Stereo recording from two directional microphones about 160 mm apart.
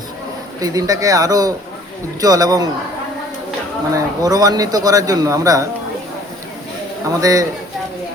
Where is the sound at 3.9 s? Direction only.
25° right (ahead or behind).